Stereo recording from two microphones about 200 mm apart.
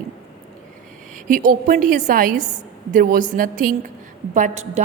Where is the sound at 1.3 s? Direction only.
40° right (ahead or behind).